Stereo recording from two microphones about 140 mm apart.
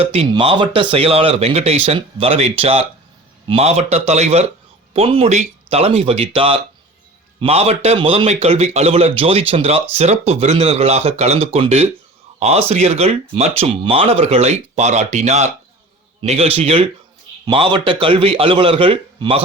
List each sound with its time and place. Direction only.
0.0 s a man's voice: 45° right (ahead or behind)